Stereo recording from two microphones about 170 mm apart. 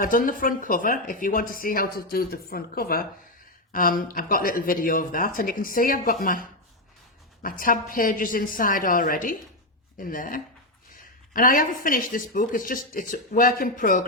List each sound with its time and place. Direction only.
0.0 s speech: 55° left (ahead or behind)